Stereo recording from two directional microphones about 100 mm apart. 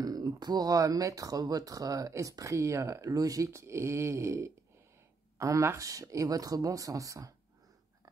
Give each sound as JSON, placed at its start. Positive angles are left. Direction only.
{"t": 0.0, "sound": "speech", "side_deg": -40}